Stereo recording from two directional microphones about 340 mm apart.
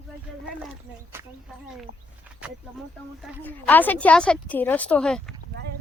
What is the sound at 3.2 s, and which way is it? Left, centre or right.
A woman's voice, centre.